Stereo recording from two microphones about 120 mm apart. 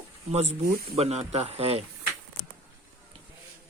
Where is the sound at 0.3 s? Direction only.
65° right (ahead or behind).